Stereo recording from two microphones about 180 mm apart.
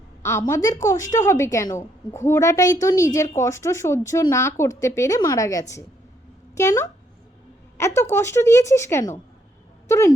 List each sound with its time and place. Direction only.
0.2 s a woman's voice: 15° left (ahead or behind)